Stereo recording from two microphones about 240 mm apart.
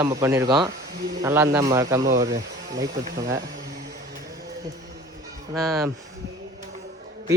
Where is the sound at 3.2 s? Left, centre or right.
Right.